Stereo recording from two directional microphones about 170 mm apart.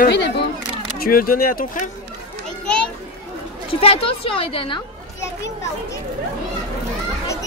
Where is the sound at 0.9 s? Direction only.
60° left (ahead or behind).